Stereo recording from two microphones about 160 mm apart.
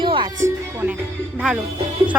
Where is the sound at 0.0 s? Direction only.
30° right (ahead or behind).